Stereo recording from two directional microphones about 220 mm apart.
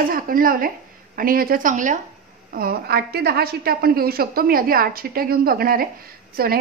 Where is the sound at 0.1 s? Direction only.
40° right (ahead or behind).